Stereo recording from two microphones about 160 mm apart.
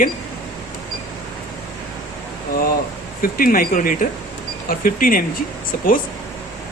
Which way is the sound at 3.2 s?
60° left (ahead or behind).